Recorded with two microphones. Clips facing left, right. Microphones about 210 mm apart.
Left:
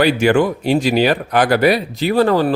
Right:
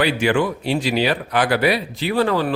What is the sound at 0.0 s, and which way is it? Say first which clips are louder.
A man's voice: left 5 dB; 45° left (ahead or behind).